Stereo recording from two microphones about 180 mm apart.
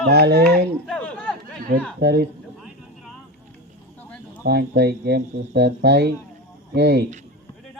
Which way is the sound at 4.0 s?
5° left (ahead or behind).